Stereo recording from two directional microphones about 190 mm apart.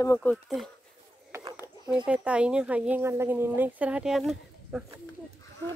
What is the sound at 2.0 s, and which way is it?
Speech, 5° right (ahead or behind).